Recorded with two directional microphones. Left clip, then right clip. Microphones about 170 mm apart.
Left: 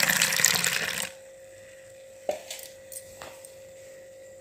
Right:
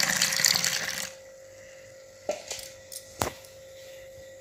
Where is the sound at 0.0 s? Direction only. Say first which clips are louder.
Left 2 dB; 25° left (ahead or behind).